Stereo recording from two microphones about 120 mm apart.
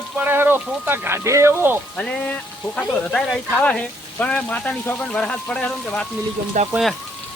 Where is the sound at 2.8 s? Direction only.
5° left (ahead or behind).